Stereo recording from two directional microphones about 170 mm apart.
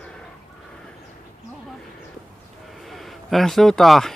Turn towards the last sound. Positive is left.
turn(degrees=0)  # may be behind; listen again after turning